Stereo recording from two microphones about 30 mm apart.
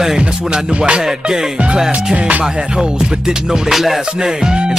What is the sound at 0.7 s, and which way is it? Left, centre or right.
Music, right.